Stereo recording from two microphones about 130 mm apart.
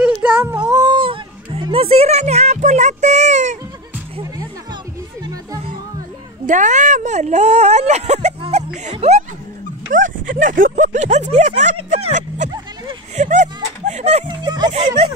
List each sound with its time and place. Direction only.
0.0 s a sound: 10° right (ahead or behind)
0.7 s music: 30° right (ahead or behind); by 3.5 s 65° right (ahead or behind)
5.2 s music: 25° right (ahead or behind)
6.4 s speech: 70° right (ahead or behind); by 9.2 s 50° right (ahead or behind)
9.9 s speech: 90° right; by 12.4 s 65° right (ahead or behind)
13.1 s music: 65° right (ahead or behind)
14.4 s music: 35° right (ahead or behind)